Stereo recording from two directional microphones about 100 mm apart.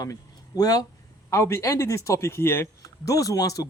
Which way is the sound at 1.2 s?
25° left (ahead or behind).